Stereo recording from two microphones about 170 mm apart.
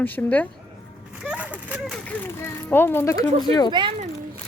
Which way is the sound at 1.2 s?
5° right (ahead or behind).